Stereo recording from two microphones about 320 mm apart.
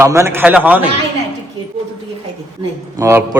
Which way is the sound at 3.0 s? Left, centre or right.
Centre.